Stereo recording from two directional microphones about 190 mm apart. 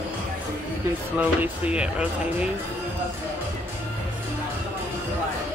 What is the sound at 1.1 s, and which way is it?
Speech, 5° right (ahead or behind).